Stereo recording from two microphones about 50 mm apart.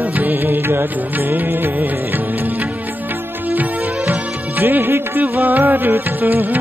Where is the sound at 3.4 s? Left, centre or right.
Right.